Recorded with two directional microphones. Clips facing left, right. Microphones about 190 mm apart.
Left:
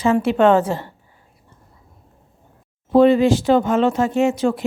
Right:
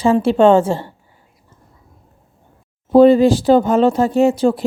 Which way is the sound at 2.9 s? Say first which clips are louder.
Right 4 dB; 35° right (ahead or behind).